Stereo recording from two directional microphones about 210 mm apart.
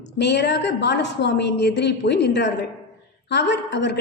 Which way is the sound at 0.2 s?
55° left (ahead or behind).